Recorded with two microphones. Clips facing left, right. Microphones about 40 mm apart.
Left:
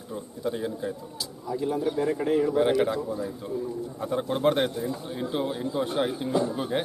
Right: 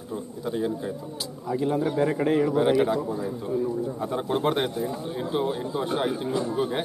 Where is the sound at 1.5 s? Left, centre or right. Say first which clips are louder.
Right 2 dB; right.